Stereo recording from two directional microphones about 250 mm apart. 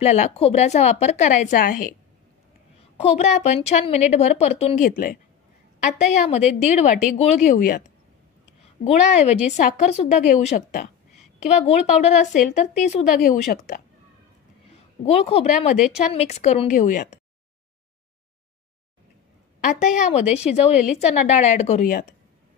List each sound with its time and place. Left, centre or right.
0.0 s a woman's voice: left
3.0 s a woman's voice: left
8.8 s a woman's voice: left
15.0 s a woman's voice: left
19.6 s a woman's voice: left